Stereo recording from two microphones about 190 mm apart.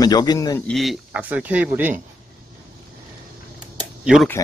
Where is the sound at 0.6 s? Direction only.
Centre (ahead or behind).